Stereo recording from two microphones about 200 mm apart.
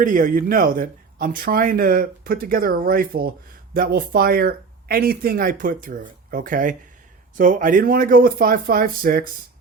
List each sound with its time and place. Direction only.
0.0 s speech: 40° right (ahead or behind)